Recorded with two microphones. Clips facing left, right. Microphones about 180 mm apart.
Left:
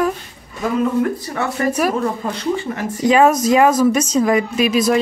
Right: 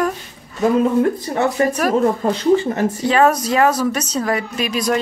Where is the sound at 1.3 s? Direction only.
30° right (ahead or behind).